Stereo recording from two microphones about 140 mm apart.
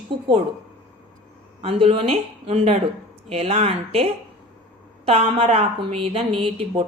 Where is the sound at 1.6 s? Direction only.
45° right (ahead or behind).